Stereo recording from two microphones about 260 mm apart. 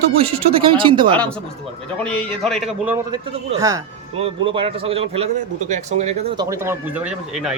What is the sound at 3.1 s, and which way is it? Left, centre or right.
Speech, right.